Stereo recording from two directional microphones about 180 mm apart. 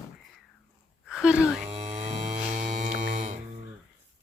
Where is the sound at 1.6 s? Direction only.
35° right (ahead or behind).